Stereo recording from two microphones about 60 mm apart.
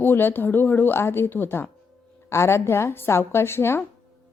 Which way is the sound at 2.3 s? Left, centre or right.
Left.